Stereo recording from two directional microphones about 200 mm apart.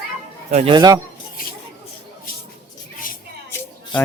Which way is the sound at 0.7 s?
20° right (ahead or behind).